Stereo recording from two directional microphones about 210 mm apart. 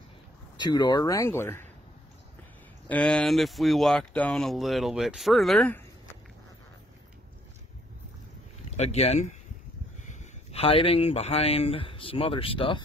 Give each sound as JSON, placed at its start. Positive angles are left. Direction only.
{"t": 0.6, "sound": "speech", "side_deg": 20}
{"t": 2.9, "sound": "speech", "side_deg": 5}
{"t": 8.6, "sound": "speech", "side_deg": 30}